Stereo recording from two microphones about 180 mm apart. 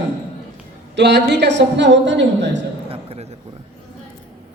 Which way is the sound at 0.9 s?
70° right (ahead or behind).